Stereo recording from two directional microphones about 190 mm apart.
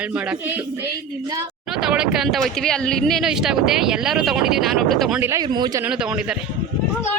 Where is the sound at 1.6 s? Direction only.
5° right (ahead or behind).